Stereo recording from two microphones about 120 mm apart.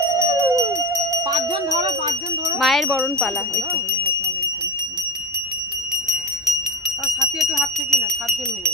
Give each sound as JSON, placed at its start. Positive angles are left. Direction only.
{"t": 0.2, "sound": "a sound", "side_deg": -25}
{"t": 2.6, "sound": "speech", "side_deg": 0}
{"t": 7.5, "sound": "speech", "side_deg": 0}